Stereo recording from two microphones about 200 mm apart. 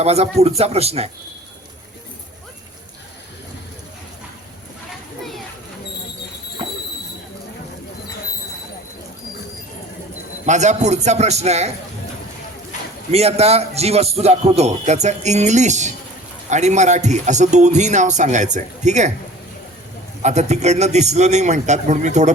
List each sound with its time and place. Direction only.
0.0 s a man's voice: 30° right (ahead or behind)
10.4 s a man's voice: 35° right (ahead or behind)
13.1 s a man's voice: 30° right (ahead or behind)
20.2 s a man's voice: 35° right (ahead or behind)